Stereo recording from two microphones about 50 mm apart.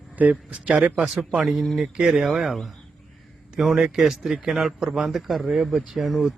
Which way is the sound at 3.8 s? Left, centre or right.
Centre.